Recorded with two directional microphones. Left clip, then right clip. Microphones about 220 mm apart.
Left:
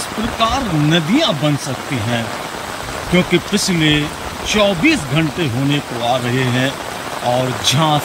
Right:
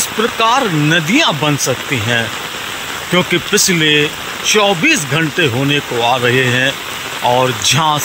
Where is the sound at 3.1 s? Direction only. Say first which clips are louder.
Right 3 dB; 10° left (ahead or behind).